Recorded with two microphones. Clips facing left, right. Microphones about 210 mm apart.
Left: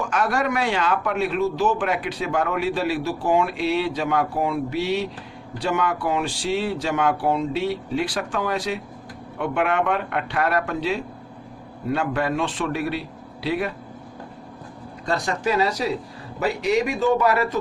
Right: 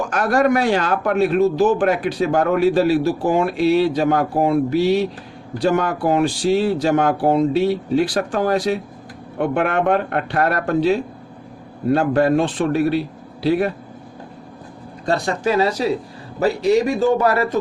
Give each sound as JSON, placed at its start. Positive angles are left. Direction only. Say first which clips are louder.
{"t": 0.1, "sound": "a man's voice", "louder": "right 8 dB", "side_deg": -40}
{"t": 15.1, "sound": "a man's voice", "louder": "right 4 dB", "side_deg": -30}